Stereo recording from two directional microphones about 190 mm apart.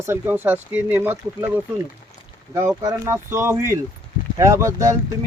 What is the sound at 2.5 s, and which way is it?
Speech, 15° right (ahead or behind).